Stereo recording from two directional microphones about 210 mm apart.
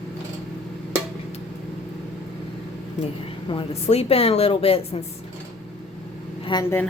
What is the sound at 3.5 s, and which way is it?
A woman's voice, 30° left (ahead or behind).